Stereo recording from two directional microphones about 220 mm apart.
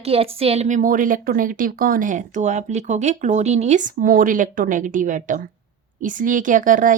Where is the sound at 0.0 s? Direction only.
25° right (ahead or behind).